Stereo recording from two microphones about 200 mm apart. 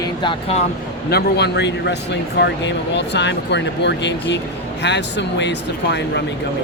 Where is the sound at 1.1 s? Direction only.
55° left (ahead or behind).